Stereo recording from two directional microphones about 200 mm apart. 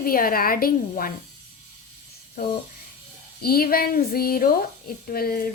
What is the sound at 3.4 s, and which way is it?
A woman's voice, 50° left (ahead or behind).